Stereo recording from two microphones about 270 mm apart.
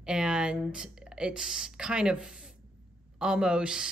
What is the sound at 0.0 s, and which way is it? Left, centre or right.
Speech, centre.